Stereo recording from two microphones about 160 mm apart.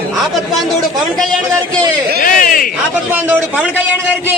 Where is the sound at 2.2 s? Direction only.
60° left (ahead or behind).